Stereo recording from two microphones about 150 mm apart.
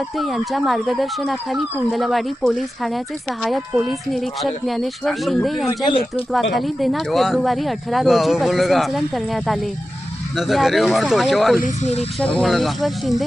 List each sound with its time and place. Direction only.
0.2 s speech: centre (ahead or behind)
11.6 s speech: 50° left (ahead or behind)
12.2 s speech: 5° left (ahead or behind)